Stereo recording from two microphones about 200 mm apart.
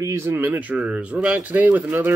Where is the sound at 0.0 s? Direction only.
15° right (ahead or behind).